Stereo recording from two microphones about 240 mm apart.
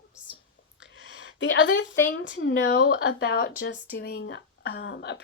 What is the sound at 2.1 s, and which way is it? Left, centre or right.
Speech, left.